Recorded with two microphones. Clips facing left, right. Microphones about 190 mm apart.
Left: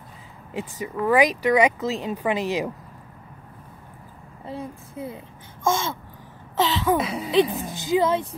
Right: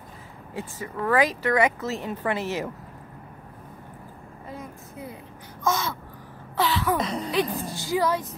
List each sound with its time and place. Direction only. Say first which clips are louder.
0.6 s speech: left 4 dB; 15° left (ahead or behind)
4.5 s a child's voice: left 6 dB; 30° left (ahead or behind)
6.5 s a sound: left 3 dB; 20° left (ahead or behind)
7.0 s a woman's voice: left 5 dB; 5° left (ahead or behind)
7.7 s a child's voice: left 4 dB; 20° left (ahead or behind)